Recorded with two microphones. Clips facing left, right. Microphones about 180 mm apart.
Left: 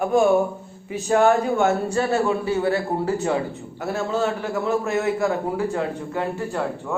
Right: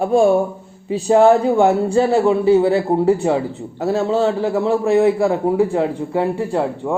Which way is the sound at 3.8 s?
35° right (ahead or behind).